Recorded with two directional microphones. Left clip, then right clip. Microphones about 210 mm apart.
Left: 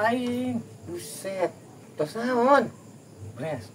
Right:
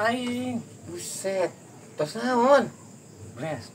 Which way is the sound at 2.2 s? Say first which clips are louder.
Right 1 dB; 20° right (ahead or behind).